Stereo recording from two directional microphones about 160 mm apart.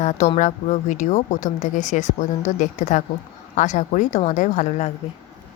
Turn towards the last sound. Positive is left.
turn(degrees=45)  # may be behind; listen again after turning